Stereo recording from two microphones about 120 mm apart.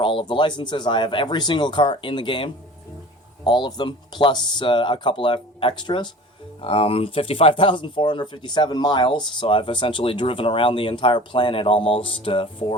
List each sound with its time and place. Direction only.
0.0 s speech: 45° left (ahead or behind)